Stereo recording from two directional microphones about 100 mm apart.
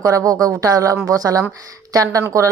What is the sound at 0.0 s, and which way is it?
Speech, 35° right (ahead or behind).